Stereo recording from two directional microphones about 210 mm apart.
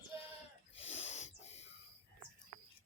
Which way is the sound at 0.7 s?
30° left (ahead or behind).